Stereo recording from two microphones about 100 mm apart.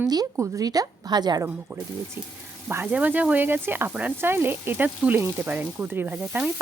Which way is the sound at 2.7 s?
25° right (ahead or behind).